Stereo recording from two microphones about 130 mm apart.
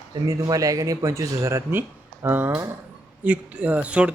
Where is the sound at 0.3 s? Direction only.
25° right (ahead or behind).